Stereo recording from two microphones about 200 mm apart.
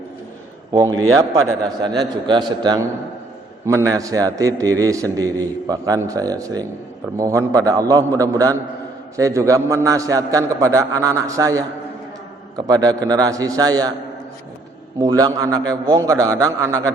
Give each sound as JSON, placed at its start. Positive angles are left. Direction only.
{"t": 0.9, "sound": "a man's voice", "side_deg": -90}
{"t": 1.6, "sound": "a man's voice", "side_deg": -20}
{"t": 14.9, "sound": "a man's voice", "side_deg": -20}